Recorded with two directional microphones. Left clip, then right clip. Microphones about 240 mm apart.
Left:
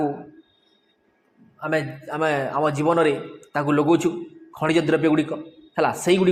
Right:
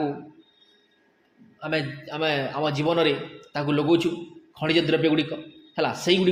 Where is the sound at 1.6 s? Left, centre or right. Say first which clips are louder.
Left 3 dB; centre.